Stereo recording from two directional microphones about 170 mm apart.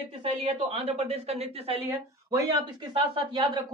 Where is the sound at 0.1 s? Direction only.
35° right (ahead or behind).